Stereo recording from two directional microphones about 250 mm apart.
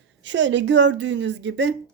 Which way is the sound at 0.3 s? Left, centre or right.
Right.